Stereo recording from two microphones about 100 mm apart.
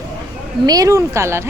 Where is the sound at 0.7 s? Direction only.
35° right (ahead or behind).